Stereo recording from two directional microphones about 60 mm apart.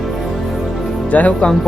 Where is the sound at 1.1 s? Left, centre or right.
Left.